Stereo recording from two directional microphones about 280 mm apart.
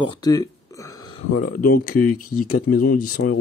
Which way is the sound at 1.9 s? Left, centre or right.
Left.